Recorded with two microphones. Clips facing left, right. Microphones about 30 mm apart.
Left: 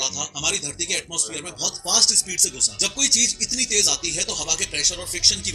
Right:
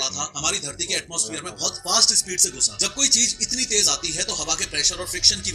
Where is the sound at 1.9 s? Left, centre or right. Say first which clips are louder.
Even; right.